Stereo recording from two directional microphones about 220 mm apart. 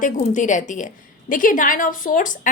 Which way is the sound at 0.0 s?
35° left (ahead or behind).